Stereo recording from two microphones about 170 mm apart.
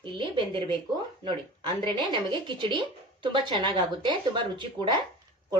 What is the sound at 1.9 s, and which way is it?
Speech, 30° right (ahead or behind).